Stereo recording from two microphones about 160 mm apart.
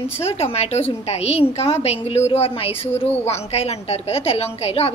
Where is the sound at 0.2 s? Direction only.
40° left (ahead or behind).